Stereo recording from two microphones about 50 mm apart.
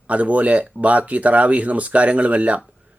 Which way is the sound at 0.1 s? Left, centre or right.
Right.